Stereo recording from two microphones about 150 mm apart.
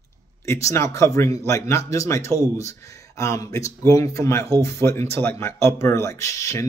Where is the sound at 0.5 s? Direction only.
20° left (ahead or behind).